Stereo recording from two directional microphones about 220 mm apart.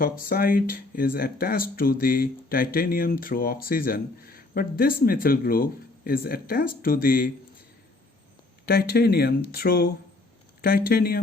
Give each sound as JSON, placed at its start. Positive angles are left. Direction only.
{"t": 0.0, "sound": "speech", "side_deg": 40}
{"t": 8.6, "sound": "speech", "side_deg": 45}